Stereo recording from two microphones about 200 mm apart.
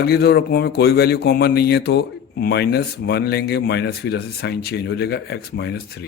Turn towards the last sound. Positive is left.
turn(degrees=55)  # may be behind; listen again after turning